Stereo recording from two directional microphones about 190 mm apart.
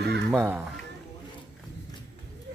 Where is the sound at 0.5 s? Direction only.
5° right (ahead or behind).